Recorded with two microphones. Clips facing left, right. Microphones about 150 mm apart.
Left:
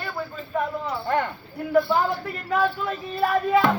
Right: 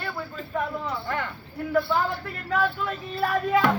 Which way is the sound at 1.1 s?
30° left (ahead or behind).